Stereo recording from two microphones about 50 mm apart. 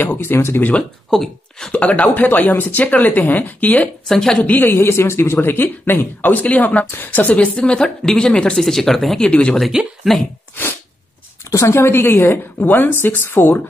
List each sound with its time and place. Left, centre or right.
0.2 s speech: left
1.1 s speech: centre
1.7 s speech: left
2.1 s speech: left
4.1 s a woman's voice: centre
4.4 s speech: left
4.6 s speech: left
5.5 s speech: left
6.9 s speech: left
7.5 s a woman's voice: centre
9.2 s speech: left
10.0 s speech: centre
10.5 s sneeze: left
11.5 s speech: left